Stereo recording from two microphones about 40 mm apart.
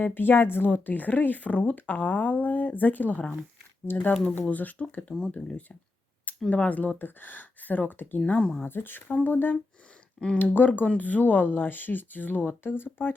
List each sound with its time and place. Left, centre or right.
0.0 s speech: left
0.7 s speech: left
3.9 s speech: left
4.4 s speech: left
5.0 s speech: centre
5.3 s speech: left
8.4 s speech: left
8.6 s speech: left